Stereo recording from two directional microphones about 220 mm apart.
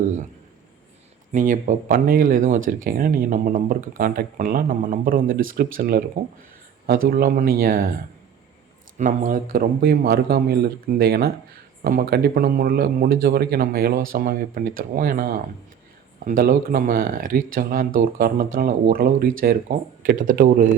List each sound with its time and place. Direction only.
1.3 s speech: 35° right (ahead or behind)
9.0 s speech: 35° right (ahead or behind)